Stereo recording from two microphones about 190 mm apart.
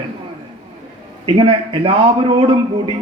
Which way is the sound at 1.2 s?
30° right (ahead or behind).